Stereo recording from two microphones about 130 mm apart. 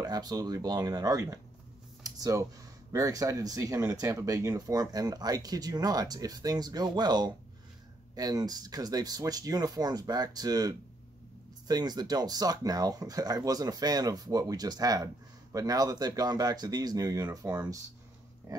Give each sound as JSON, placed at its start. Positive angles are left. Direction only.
{"t": 0.0, "sound": "speech", "side_deg": -30}
{"t": 2.0, "sound": "a sound", "side_deg": -30}
{"t": 2.9, "sound": "speech", "side_deg": -25}